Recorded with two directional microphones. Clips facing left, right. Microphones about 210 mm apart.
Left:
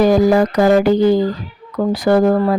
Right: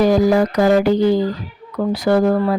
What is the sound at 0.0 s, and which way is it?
Speech, 50° left (ahead or behind).